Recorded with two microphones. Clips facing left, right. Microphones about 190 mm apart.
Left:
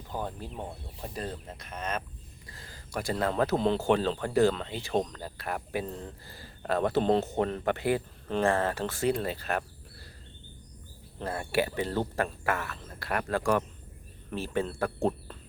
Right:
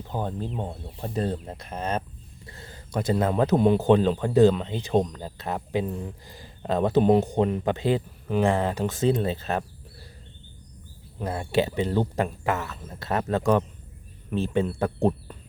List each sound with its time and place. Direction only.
0.1 s speech: 20° right (ahead or behind)
11.2 s speech: 20° right (ahead or behind)